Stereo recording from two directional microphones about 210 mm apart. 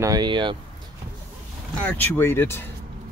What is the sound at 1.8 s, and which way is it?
Speech, 10° left (ahead or behind).